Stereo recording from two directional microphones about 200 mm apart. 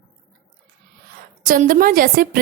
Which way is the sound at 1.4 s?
45° right (ahead or behind).